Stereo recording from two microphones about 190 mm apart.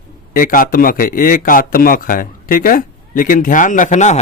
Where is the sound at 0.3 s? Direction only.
45° left (ahead or behind).